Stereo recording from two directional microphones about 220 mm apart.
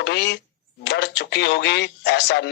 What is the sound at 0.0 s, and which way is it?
Speech, 50° left (ahead or behind).